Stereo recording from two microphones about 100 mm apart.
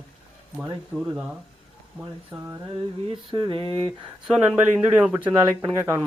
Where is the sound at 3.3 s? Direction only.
55° right (ahead or behind).